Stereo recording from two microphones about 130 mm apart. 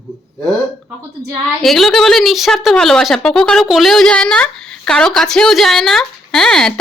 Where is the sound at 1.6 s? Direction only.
Centre (ahead or behind).